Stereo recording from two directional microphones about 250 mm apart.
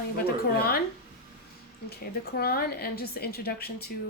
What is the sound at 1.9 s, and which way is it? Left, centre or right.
Speech, left.